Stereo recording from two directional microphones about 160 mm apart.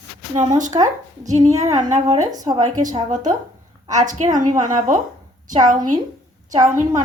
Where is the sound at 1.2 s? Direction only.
45° right (ahead or behind).